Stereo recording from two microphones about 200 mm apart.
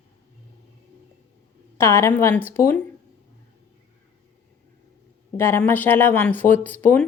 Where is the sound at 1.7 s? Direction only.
15° left (ahead or behind).